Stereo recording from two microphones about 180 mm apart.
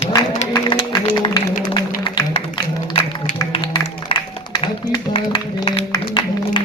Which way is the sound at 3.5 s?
30° left (ahead or behind).